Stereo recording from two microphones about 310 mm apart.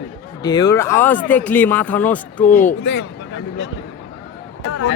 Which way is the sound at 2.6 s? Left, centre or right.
Left.